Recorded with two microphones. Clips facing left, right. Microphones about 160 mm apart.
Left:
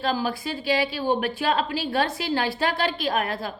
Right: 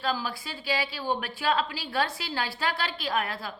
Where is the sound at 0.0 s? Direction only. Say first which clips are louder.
Left 5 dB; 20° left (ahead or behind).